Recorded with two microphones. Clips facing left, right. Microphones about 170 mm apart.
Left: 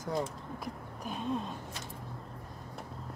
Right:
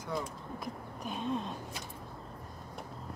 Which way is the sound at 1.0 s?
5° left (ahead or behind).